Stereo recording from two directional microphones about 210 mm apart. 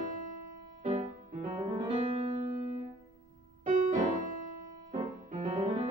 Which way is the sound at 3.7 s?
35° right (ahead or behind).